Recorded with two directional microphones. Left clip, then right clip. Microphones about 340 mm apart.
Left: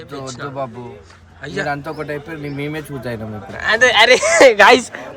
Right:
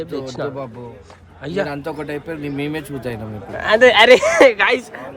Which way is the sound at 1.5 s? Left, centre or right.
Centre.